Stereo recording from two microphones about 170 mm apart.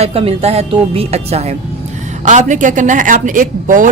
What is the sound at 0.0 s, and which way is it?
Speech, 35° right (ahead or behind).